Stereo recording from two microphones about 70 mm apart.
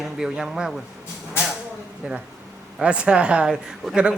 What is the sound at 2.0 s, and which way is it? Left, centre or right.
Speech, centre.